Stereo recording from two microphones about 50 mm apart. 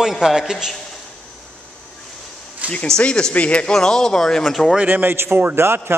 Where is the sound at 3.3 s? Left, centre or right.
Left.